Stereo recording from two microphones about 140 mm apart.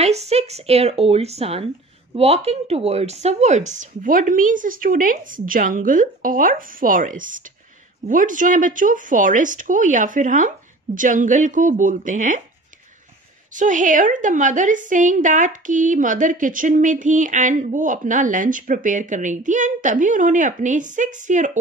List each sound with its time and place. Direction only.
0.0 s speech: 50° right (ahead or behind); by 12.4 s 65° right (ahead or behind)
13.5 s a woman's voice: 65° right (ahead or behind)